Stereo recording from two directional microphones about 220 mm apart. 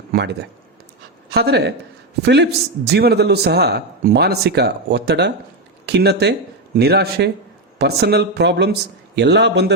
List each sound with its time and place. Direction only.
1.3 s a man's voice: 45° right (ahead or behind)